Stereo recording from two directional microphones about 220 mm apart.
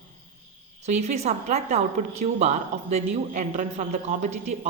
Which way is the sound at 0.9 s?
30° right (ahead or behind).